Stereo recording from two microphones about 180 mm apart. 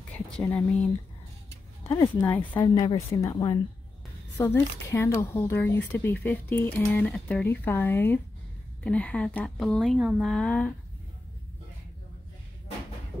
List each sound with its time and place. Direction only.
0.3 s speech: 5° left (ahead or behind)
1.5 s speech: 15° left (ahead or behind)
2.6 s speech: 25° left (ahead or behind); by 10.7 s 5° left (ahead or behind)